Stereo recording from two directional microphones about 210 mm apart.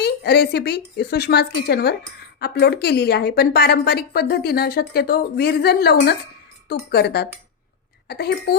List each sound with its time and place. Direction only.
0.0 s speech: 50° left (ahead or behind)